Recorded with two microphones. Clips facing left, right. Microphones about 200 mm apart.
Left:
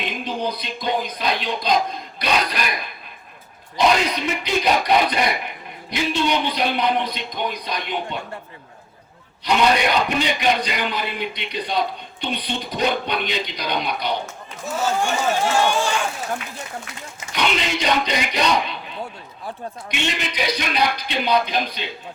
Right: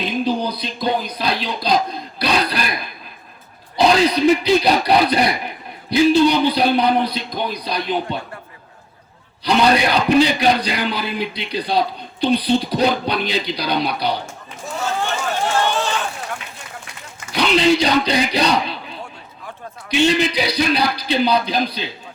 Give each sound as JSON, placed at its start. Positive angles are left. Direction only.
{"t": 0.0, "sound": "music", "side_deg": -35}
{"t": 3.8, "sound": "a man's voice", "side_deg": -35}
{"t": 9.4, "sound": "a man's voice", "side_deg": -35}
{"t": 15.6, "sound": "run", "side_deg": 10}
{"t": 17.3, "sound": "a man's voice", "side_deg": -35}
{"t": 19.9, "sound": "a man's voice", "side_deg": -35}